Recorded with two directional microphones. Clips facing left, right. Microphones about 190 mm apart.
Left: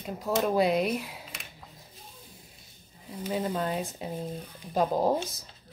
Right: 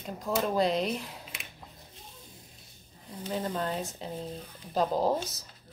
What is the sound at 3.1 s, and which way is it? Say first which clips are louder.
Speech: left 3 dB; 10° left (ahead or behind).